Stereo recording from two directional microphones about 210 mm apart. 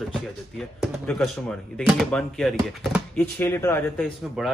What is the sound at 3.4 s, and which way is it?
A man's voice, 10° left (ahead or behind).